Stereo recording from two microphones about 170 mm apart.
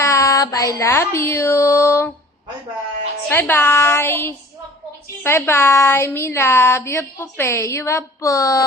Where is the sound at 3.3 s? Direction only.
10° left (ahead or behind).